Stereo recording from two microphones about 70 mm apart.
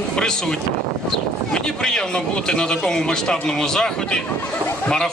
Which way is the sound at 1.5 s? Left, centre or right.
Centre.